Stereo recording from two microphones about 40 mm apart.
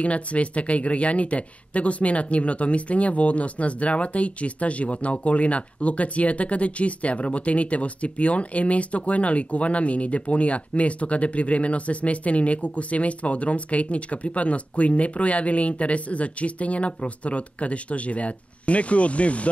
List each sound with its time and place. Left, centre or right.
0.0 s speech: left